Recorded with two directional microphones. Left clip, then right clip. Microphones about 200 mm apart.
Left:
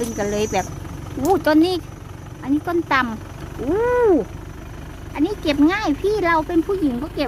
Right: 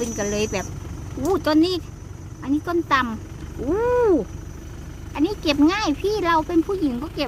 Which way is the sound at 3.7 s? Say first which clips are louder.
Left 2 dB; 5° right (ahead or behind).